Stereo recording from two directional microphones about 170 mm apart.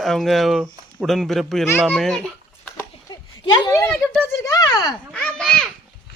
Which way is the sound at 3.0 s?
20° left (ahead or behind).